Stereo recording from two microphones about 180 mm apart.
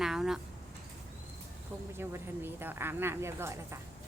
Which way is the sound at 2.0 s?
10° right (ahead or behind).